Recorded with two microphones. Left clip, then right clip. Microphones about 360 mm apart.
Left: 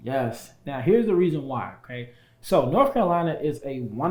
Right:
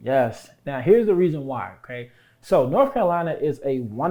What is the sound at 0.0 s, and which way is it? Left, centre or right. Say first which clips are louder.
Speech: right 6 dB; right.